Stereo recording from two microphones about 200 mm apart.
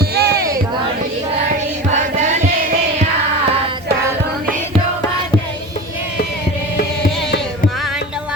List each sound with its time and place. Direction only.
0.0 s music: 50° right (ahead or behind)
1.9 s chant: 35° right (ahead or behind)